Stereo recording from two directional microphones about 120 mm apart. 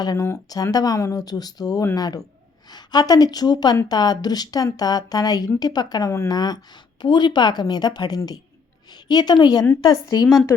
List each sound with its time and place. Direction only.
0.0 s a woman's voice: 35° left (ahead or behind)